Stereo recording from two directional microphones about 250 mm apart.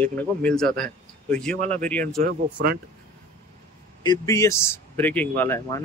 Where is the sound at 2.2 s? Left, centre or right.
Right.